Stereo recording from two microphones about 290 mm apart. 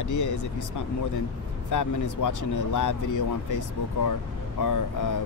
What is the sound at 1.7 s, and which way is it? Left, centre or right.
Speech, left.